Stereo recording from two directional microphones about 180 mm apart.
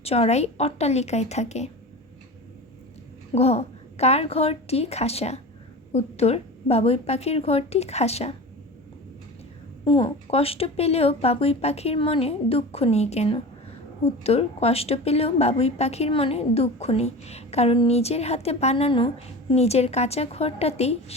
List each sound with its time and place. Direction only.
0.0 s a woman's voice: 35° left (ahead or behind)
3.3 s a woman's voice: 35° left (ahead or behind)
9.8 s a woman's voice: 30° left (ahead or behind)